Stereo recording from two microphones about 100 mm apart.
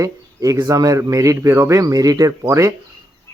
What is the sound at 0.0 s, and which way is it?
Speech, 35° right (ahead or behind).